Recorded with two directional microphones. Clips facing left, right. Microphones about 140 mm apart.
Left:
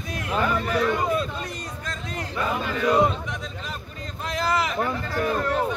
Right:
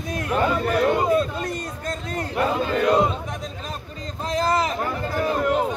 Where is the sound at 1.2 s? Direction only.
45° right (ahead or behind).